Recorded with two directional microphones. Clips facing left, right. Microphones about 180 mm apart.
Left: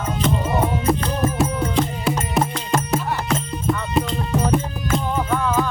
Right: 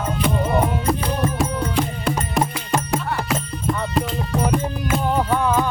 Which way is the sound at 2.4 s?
10° right (ahead or behind).